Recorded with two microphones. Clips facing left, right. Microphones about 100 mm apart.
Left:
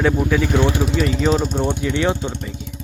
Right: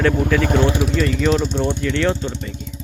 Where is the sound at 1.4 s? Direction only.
45° left (ahead or behind).